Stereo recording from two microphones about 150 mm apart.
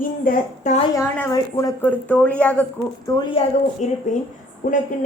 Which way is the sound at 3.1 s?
25° left (ahead or behind).